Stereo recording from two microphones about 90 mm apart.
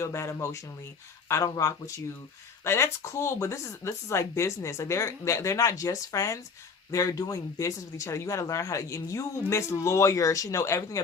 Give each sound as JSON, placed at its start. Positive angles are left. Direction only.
{"t": 0.0, "sound": "speech", "side_deg": 30}